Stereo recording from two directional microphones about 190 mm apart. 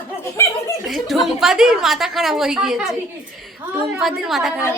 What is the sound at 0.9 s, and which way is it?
A woman's voice, centre (ahead or behind).